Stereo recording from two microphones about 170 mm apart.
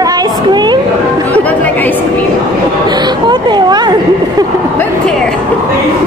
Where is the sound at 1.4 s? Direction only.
10° left (ahead or behind).